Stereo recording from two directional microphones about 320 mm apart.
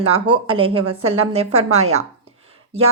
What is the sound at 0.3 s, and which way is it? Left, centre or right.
A woman's voice, centre.